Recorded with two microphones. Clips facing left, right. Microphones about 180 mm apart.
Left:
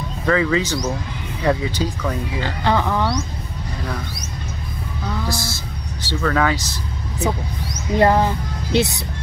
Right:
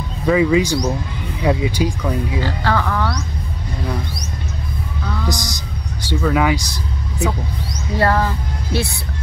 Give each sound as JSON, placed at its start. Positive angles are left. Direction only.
{"t": 0.3, "sound": "speech", "side_deg": -15}
{"t": 2.4, "sound": "speech", "side_deg": 20}
{"t": 5.3, "sound": "speech", "side_deg": -15}
{"t": 7.9, "sound": "speech", "side_deg": 20}